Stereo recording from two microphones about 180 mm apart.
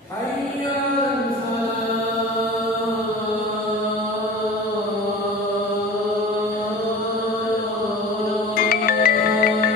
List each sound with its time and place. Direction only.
8.5 s music: 55° left (ahead or behind)